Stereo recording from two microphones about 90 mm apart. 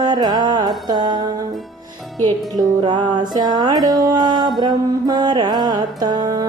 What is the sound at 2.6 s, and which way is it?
Music, 55° right (ahead or behind).